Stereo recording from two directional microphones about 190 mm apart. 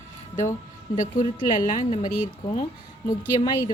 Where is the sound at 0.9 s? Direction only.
45° left (ahead or behind).